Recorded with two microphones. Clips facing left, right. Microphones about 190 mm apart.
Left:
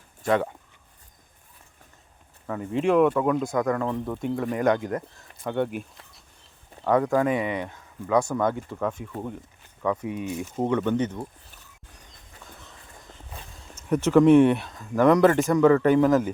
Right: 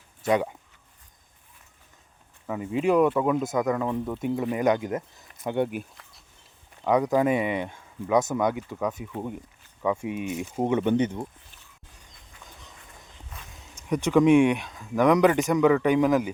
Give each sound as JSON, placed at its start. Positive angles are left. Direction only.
{"t": 2.5, "sound": "speech", "side_deg": -5}
{"t": 3.4, "sound": "speech", "side_deg": -20}
{"t": 4.6, "sound": "speech", "side_deg": -20}
{"t": 6.8, "sound": "speech", "side_deg": -15}
{"t": 13.6, "sound": "a sound", "side_deg": -15}
{"t": 14.3, "sound": "speech", "side_deg": -10}